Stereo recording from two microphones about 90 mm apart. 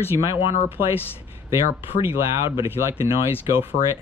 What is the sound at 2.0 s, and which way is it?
Speech, 30° right (ahead or behind).